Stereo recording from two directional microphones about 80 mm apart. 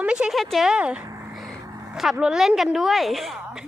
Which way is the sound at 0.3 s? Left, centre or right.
Centre.